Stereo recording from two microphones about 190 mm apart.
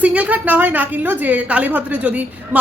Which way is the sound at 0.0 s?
10° right (ahead or behind).